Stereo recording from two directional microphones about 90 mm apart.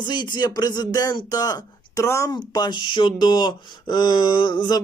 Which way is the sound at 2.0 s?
30° left (ahead or behind).